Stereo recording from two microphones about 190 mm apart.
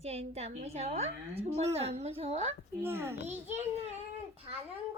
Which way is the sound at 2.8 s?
10° right (ahead or behind).